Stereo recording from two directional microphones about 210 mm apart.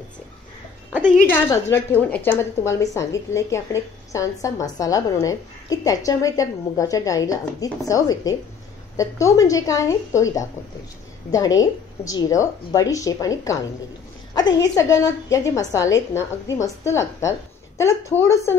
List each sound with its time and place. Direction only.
1.2 s a woman's voice: 10° left (ahead or behind)